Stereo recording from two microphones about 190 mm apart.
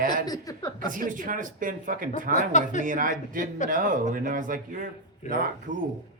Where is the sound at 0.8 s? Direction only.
45° right (ahead or behind).